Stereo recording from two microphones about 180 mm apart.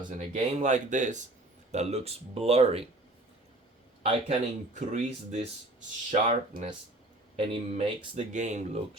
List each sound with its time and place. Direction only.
0.3 s speech: 40° right (ahead or behind)
4.0 s speech: 40° right (ahead or behind)
7.3 s speech: 30° right (ahead or behind)